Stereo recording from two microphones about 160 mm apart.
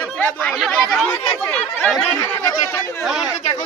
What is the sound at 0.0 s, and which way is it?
Speech, 10° left (ahead or behind).